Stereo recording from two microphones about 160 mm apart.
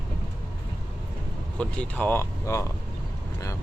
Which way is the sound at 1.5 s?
10° left (ahead or behind).